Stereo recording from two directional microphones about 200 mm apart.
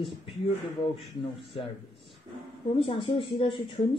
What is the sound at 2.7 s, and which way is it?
Speech, 25° left (ahead or behind).